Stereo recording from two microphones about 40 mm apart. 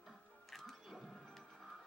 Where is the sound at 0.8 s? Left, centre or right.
Centre.